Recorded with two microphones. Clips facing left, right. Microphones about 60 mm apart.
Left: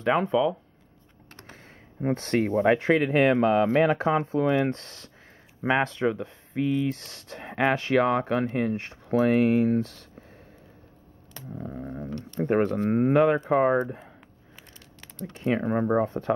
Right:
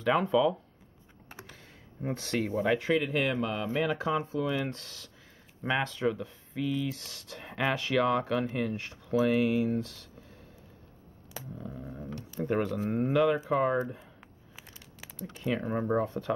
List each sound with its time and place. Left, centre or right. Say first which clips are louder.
0.1 s speech: left 2 dB; centre
1.4 s speech: left 3 dB; left
11.4 s a sound: even; centre
11.7 s speech: left 8 dB; left
15.4 s speech: left 6 dB; left